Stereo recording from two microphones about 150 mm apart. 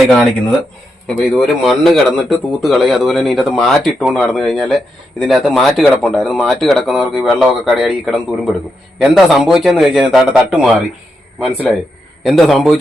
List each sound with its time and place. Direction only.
0.0 s speech: centre (ahead or behind)